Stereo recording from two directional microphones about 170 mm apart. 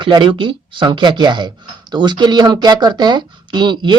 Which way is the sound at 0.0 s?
30° right (ahead or behind).